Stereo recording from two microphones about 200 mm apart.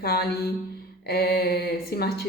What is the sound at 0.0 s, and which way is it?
A woman's voice, 50° left (ahead or behind).